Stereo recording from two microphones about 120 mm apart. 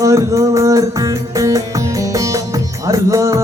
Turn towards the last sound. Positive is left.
turn(degrees=-25)  # may be behind; listen again after turning